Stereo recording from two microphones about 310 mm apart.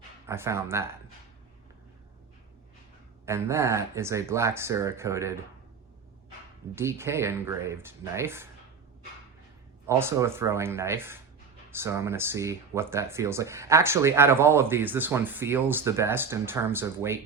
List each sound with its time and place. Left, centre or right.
0.3 s speech: centre
3.2 s speech: centre
6.7 s speech: centre
9.8 s speech: centre